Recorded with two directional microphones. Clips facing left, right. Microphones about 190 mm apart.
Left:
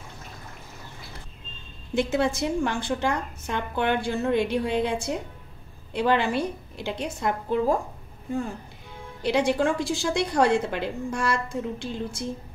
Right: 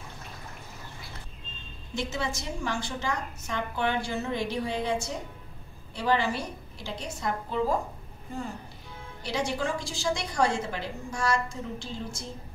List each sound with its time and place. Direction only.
2.0 s a woman's voice: 55° left (ahead or behind)
9.2 s a woman's voice: 60° left (ahead or behind)